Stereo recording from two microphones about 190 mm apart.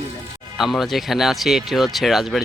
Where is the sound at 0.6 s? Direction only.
Centre (ahead or behind).